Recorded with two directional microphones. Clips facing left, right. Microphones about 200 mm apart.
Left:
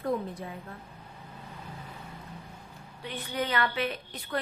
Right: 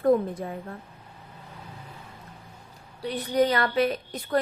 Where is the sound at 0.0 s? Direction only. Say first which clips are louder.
Right 9 dB; 50° right (ahead or behind).